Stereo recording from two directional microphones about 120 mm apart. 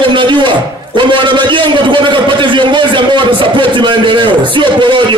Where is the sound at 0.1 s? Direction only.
40° right (ahead or behind).